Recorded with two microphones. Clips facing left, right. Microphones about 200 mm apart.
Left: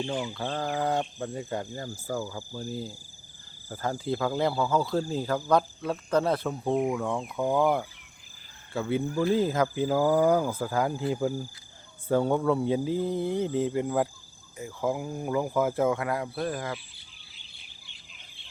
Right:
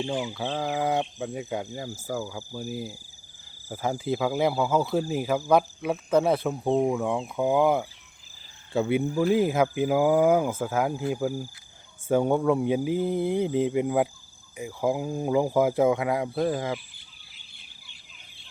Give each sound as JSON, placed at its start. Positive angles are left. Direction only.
{"t": 0.0, "sound": "speech", "side_deg": -5}
{"t": 6.7, "sound": "speech", "side_deg": -25}